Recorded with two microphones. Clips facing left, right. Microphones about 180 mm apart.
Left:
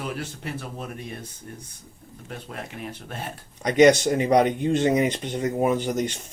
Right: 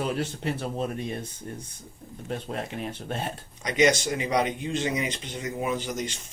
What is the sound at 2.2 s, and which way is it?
Speech, 30° right (ahead or behind).